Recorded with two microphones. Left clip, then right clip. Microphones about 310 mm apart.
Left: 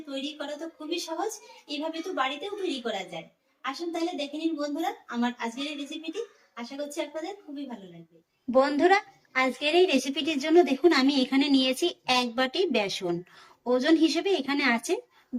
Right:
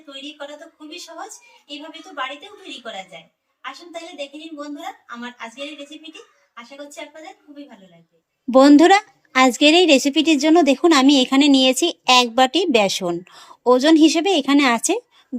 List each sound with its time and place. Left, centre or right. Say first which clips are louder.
3.6 s a woman's voice: left 2 dB; centre
8.4 s a woman's voice: right 11 dB; right